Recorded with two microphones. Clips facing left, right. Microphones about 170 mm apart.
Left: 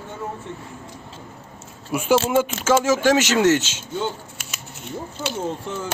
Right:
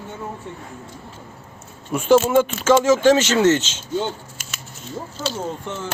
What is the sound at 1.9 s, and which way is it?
Speech, 10° left (ahead or behind).